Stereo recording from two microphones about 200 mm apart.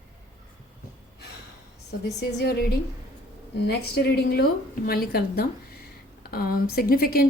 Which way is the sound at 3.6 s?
55° left (ahead or behind).